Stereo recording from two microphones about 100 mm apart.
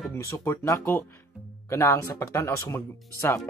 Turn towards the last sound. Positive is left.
turn(degrees=25)  # may be behind; listen again after turning